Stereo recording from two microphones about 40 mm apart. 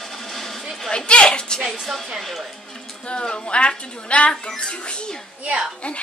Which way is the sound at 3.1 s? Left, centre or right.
Left.